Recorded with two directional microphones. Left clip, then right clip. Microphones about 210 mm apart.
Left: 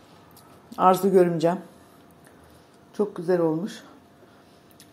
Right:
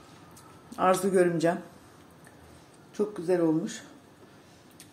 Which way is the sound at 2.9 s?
15° left (ahead or behind).